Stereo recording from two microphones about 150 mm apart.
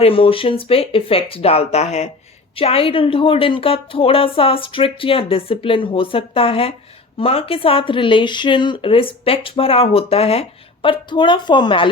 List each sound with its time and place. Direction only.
0.0 s a woman's voice: 40° left (ahead or behind)
11.1 s a woman's voice: 30° left (ahead or behind)